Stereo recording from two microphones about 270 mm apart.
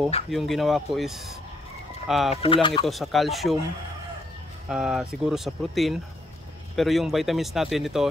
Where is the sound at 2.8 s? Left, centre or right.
Centre.